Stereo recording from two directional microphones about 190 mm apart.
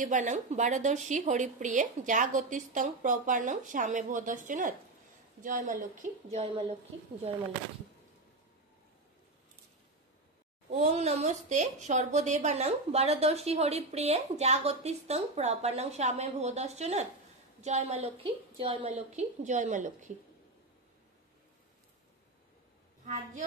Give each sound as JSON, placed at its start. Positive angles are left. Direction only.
{"t": 0.0, "sound": "speech", "side_deg": -40}
{"t": 10.7, "sound": "speech", "side_deg": -35}